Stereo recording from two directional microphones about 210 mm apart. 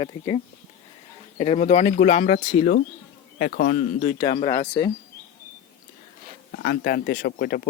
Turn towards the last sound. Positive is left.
turn(degrees=45)  # may be behind; listen again after turning